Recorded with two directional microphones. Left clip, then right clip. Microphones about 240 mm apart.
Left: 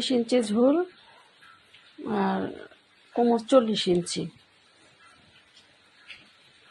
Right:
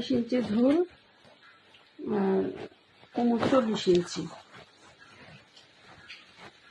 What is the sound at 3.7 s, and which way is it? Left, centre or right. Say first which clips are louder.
Speech: even; left.